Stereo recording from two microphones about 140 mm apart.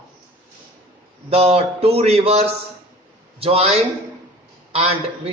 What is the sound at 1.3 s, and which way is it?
Speech, 45° right (ahead or behind).